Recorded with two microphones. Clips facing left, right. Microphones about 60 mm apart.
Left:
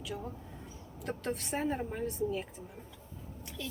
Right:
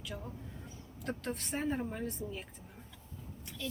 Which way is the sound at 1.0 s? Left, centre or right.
Centre.